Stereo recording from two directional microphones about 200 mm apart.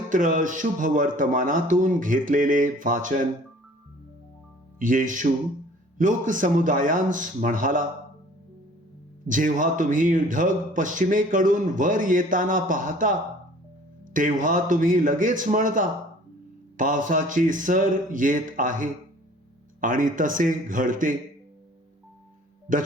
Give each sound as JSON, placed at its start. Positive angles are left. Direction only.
{"t": 0.1, "sound": "speech", "side_deg": -40}
{"t": 4.8, "sound": "speech", "side_deg": -40}
{"t": 9.2, "sound": "speech", "side_deg": -40}
{"t": 22.7, "sound": "speech", "side_deg": -40}